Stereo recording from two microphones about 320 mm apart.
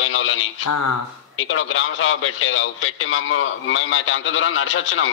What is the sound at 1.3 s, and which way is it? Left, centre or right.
A man's voice, left.